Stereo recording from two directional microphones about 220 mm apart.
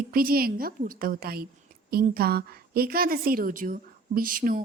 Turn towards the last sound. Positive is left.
turn(degrees=-40)  # may be behind; listen again after turning